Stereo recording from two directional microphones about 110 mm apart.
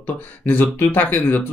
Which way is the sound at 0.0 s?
15° left (ahead or behind).